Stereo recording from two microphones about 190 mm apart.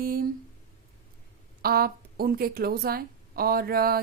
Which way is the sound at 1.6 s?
50° right (ahead or behind).